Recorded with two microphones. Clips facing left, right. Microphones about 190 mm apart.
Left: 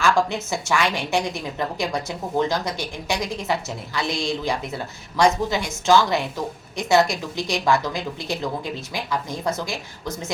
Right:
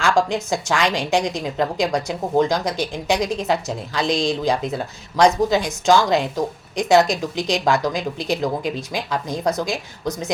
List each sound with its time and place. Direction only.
0.0 s speech: 15° right (ahead or behind)